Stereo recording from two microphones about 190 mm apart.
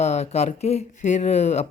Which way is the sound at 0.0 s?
35° left (ahead or behind).